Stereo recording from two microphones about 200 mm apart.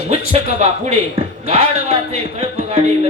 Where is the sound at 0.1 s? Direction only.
30° right (ahead or behind).